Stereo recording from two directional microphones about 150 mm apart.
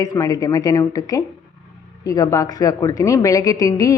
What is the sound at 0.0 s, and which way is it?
A woman's voice, 25° left (ahead or behind).